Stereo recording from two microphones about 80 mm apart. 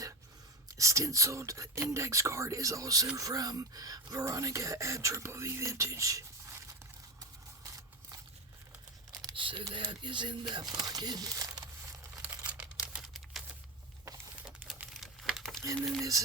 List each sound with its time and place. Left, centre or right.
0.8 s speech: right
9.3 s computer keyboard: right
9.7 s speech: right
12.5 s a sound: centre
14.9 s a sound: centre
15.6 s speech: right